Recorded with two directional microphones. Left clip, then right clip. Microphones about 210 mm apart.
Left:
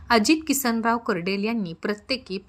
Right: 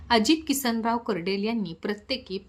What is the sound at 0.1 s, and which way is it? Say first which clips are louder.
A woman's voice: left 2 dB; 15° left (ahead or behind).